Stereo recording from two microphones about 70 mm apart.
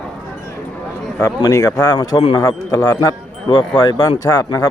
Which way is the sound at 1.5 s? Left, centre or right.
Left.